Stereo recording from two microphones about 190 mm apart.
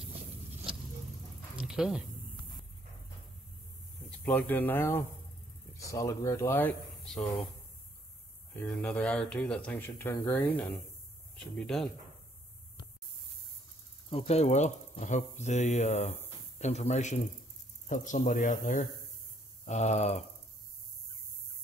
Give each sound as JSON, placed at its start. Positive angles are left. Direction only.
{"t": 1.6, "sound": "a sound", "side_deg": -5}
{"t": 4.2, "sound": "speech", "side_deg": 10}
{"t": 8.5, "sound": "speech", "side_deg": 5}
{"t": 14.1, "sound": "speech", "side_deg": 35}